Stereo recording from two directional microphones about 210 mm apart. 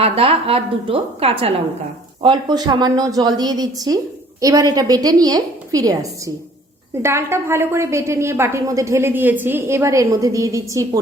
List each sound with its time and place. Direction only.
0.0 s a woman's voice: 25° right (ahead or behind)